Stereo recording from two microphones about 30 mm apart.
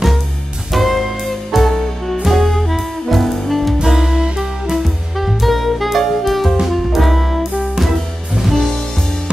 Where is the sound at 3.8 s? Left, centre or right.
Centre.